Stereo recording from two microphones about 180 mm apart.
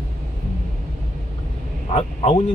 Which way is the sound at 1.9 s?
35° left (ahead or behind).